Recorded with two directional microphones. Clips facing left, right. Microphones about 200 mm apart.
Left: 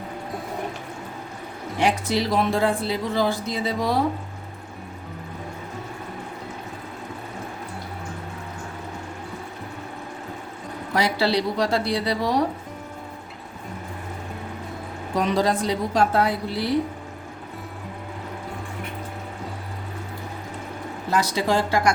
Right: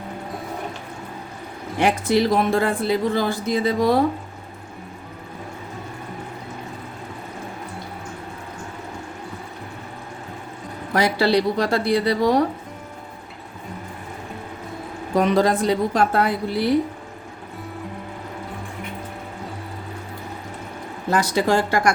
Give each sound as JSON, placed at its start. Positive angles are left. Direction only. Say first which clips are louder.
{"t": 1.8, "sound": "speech", "louder": "right 4 dB", "side_deg": -50}
{"t": 10.9, "sound": "speech", "louder": "right 3 dB", "side_deg": -50}
{"t": 15.2, "sound": "speech", "louder": "right 4 dB", "side_deg": -55}
{"t": 21.1, "sound": "speech", "louder": "right 3 dB", "side_deg": -50}